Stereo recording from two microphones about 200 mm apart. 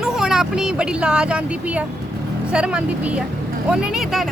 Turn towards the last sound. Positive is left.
turn(degrees=-5)  # may be behind; listen again after turning